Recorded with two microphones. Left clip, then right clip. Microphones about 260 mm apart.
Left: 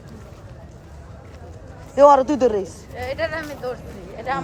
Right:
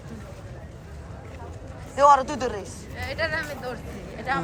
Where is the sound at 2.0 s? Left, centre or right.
Left.